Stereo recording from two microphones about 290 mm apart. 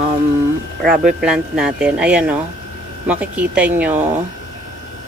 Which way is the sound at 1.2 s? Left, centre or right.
Centre.